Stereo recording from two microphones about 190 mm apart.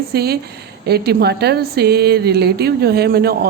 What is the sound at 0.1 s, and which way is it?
A woman's voice, 55° right (ahead or behind).